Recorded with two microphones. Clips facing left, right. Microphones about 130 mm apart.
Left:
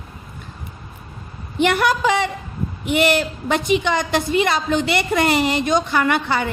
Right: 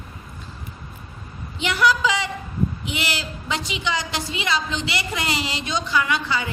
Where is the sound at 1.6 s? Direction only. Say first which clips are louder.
Left 3 dB; 55° left (ahead or behind).